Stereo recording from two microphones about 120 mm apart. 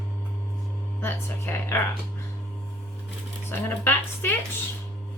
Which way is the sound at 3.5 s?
20° left (ahead or behind).